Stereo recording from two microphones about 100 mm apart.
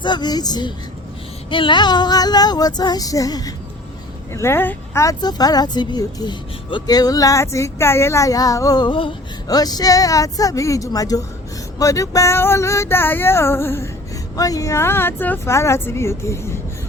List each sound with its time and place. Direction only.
0.0 s speech: 45° left (ahead or behind)
1.5 s speech: 55° left (ahead or behind); by 3.5 s 40° left (ahead or behind)
4.3 s speech: 25° left (ahead or behind)
5.0 s speech: 40° left (ahead or behind); by 9.1 s 55° left (ahead or behind)
9.5 s speech: 40° left (ahead or behind); by 13.9 s 25° left (ahead or behind)
14.3 s speech: 35° left (ahead or behind)